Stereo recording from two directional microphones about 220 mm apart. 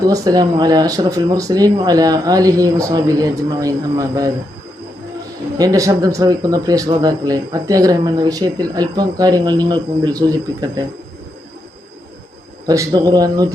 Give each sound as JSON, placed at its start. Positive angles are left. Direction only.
{"t": 0.0, "sound": "speech", "side_deg": -15}
{"t": 5.5, "sound": "speech", "side_deg": -15}
{"t": 12.6, "sound": "speech", "side_deg": -15}